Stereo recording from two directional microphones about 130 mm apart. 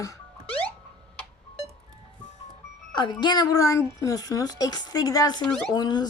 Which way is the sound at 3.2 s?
30° left (ahead or behind).